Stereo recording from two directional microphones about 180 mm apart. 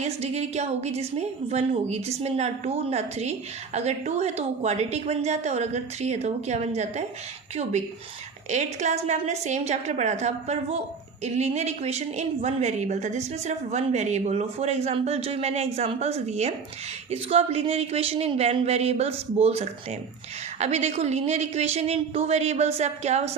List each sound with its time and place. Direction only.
0.0 s a woman's voice: 35° right (ahead or behind)
8.4 s a woman's voice: 40° right (ahead or behind)